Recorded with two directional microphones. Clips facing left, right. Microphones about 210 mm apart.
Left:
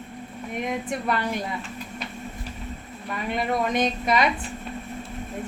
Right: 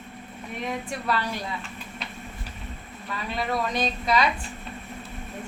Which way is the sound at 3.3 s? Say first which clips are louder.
Left 3 dB; 20° left (ahead or behind).